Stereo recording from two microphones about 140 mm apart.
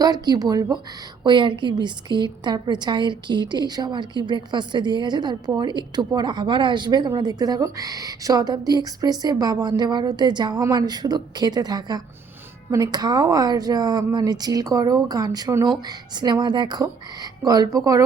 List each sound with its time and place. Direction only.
0.0 s a woman's voice: 25° right (ahead or behind)